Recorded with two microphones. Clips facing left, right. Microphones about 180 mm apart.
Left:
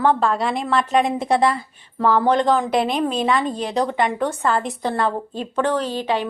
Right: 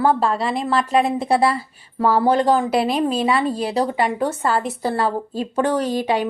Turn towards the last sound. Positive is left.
turn(degrees=-10)  # may be behind; listen again after turning